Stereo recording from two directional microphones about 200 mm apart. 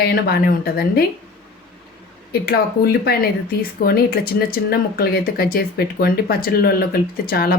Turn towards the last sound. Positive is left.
turn(degrees=50)  # may be behind; listen again after turning